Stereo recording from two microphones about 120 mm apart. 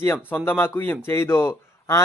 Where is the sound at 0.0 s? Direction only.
15° left (ahead or behind).